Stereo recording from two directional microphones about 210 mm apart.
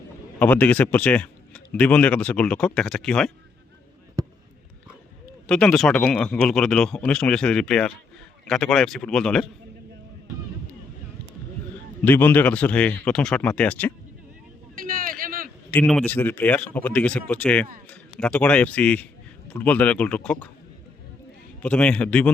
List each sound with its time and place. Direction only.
0.3 s speech: 10° left (ahead or behind)
5.5 s speech: 5° left (ahead or behind)
12.0 s speech: 10° left (ahead or behind)
14.8 s a sound: 40° right (ahead or behind)
15.7 s speech: 5° left (ahead or behind)
21.6 s speech: 5° left (ahead or behind)